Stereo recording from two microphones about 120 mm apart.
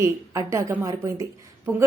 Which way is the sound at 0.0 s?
25° right (ahead or behind).